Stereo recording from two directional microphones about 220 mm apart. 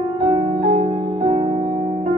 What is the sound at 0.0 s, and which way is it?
Music, 25° right (ahead or behind).